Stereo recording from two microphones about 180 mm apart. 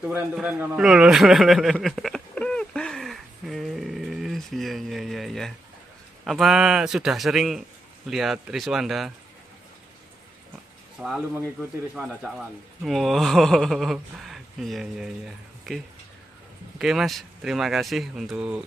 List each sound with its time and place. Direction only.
0.0 s a sound: 5° right (ahead or behind)
6.2 s speech: centre (ahead or behind)
11.0 s speech: centre (ahead or behind)